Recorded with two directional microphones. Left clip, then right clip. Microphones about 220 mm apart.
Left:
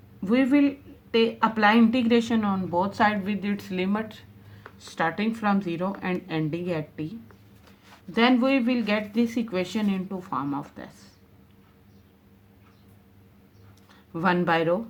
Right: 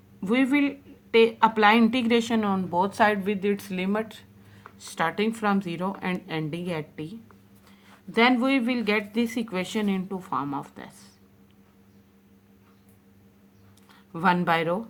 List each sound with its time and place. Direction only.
0.2 s speech: 30° right (ahead or behind)
14.1 s speech: 25° right (ahead or behind)